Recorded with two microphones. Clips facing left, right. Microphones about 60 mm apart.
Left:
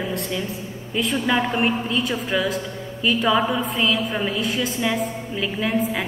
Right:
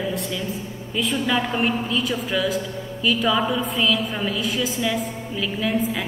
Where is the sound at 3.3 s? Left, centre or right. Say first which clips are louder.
Left 1 dB; left.